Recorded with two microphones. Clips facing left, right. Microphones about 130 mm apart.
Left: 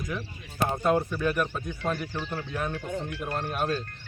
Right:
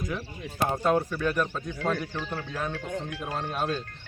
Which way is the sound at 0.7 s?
Centre (ahead or behind).